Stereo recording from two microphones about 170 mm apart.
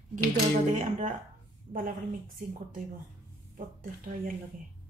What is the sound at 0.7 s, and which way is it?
Speech, 45° right (ahead or behind).